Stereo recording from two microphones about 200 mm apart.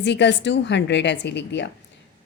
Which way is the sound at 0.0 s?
60° left (ahead or behind).